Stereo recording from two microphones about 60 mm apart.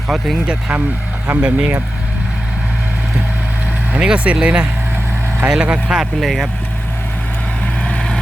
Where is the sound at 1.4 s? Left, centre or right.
Right.